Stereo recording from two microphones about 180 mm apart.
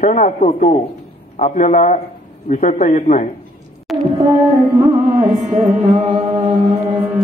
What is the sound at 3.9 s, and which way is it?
Music, centre (ahead or behind).